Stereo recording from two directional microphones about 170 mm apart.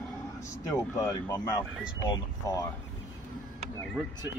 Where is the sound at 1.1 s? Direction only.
20° left (ahead or behind).